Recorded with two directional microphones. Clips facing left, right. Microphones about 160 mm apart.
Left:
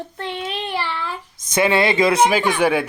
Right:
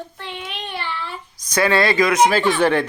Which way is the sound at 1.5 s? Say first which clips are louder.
Even; 20° left (ahead or behind).